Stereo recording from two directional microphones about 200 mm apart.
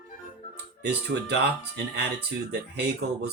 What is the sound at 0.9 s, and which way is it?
Speech, 55° right (ahead or behind).